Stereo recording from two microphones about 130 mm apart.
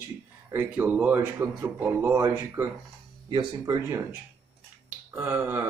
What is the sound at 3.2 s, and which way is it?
Speech, 30° right (ahead or behind).